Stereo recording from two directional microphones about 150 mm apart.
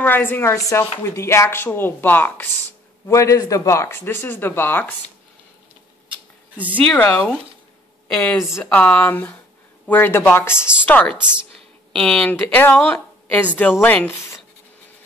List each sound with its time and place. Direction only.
0.0 s speech: 10° left (ahead or behind)
6.9 s speech: 10° left (ahead or behind)
11.1 s a woman's voice: 5° right (ahead or behind)
11.9 s a woman's voice: 5° left (ahead or behind)